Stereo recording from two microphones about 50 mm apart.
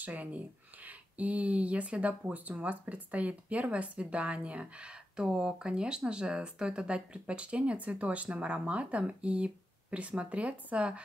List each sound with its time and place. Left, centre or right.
0.0 s speech: right